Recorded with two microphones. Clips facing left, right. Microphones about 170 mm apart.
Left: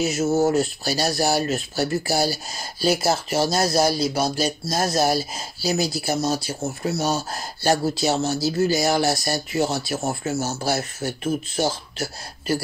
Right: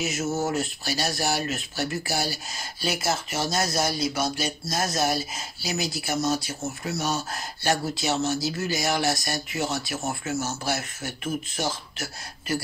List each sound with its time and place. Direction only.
0.0 s speech: 35° left (ahead or behind)